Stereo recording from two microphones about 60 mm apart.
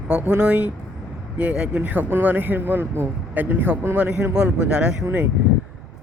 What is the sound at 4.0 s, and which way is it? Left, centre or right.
Speech, centre.